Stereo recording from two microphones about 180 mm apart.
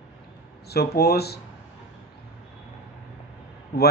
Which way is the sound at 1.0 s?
60° left (ahead or behind).